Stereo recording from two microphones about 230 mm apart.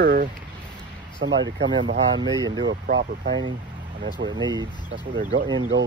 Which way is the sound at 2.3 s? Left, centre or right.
Centre.